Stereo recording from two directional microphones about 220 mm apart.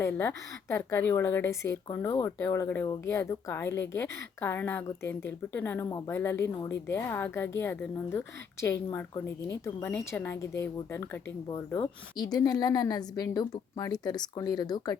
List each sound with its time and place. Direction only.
0.0 s speech: 10° left (ahead or behind)